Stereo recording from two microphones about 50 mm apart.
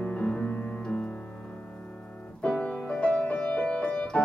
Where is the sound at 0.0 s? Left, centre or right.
Left.